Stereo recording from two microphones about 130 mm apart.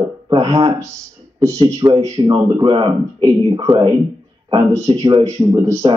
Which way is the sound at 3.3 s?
25° right (ahead or behind).